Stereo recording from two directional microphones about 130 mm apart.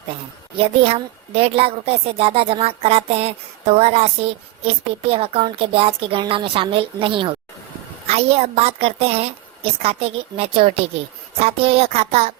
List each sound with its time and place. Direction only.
0.6 s a woman's voice: 45° right (ahead or behind)